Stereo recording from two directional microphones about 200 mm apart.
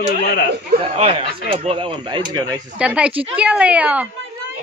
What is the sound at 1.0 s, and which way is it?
Speech, 30° right (ahead or behind).